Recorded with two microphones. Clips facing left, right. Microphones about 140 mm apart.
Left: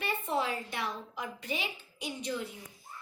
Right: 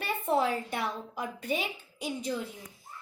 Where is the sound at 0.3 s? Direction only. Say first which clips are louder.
Right 7 dB; 45° right (ahead or behind).